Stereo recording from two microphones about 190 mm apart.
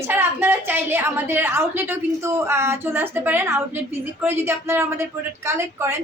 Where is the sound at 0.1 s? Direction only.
10° right (ahead or behind).